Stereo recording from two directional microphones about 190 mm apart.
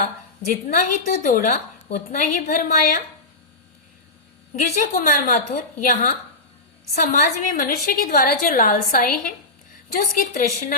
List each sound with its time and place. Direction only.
0.0 s speech: 50° left (ahead or behind)
4.5 s speech: 45° left (ahead or behind)